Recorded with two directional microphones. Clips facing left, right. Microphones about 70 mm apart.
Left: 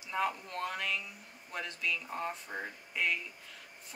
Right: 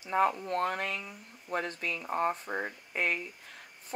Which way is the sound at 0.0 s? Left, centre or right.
Right.